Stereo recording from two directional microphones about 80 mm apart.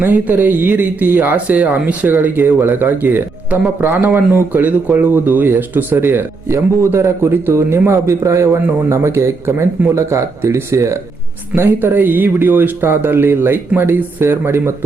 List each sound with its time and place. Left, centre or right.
0.0 s speech: right
11.5 s speech: right